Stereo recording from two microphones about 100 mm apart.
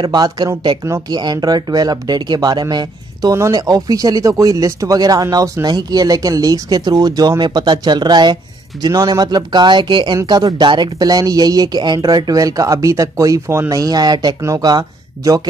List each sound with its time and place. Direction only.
0.0 s speech: 45° right (ahead or behind)